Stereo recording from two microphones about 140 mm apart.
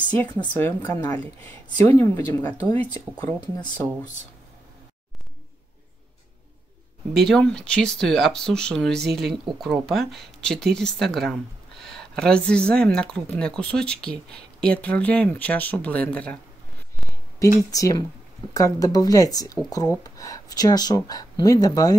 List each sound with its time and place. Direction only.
0.6 s speech: 15° left (ahead or behind)
7.2 s speech: 5° left (ahead or behind)
17.6 s speech: 25° left (ahead or behind)